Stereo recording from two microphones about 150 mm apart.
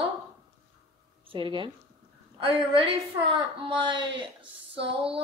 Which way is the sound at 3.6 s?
30° right (ahead or behind).